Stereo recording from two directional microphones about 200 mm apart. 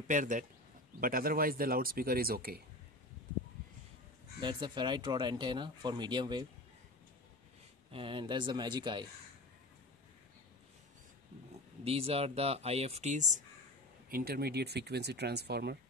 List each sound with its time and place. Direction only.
0.1 s a man's voice: 40° right (ahead or behind)
4.4 s speech: 20° right (ahead or behind)
7.9 s speech: 25° right (ahead or behind)
11.8 s speech: 30° right (ahead or behind)
14.0 s speech: 50° right (ahead or behind)